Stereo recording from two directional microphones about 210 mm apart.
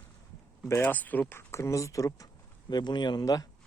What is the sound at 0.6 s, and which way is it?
Speech, 10° left (ahead or behind).